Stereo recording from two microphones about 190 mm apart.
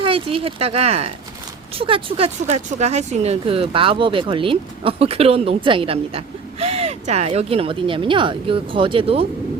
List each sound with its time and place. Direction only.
0.0 s speech: 30° right (ahead or behind)